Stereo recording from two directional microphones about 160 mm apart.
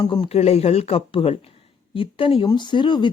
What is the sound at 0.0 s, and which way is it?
Speech, 30° left (ahead or behind).